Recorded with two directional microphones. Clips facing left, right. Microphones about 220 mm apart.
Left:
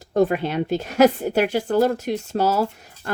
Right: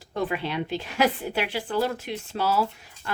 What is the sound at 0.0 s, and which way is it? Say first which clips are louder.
Speech: left 9 dB; 45° left (ahead or behind).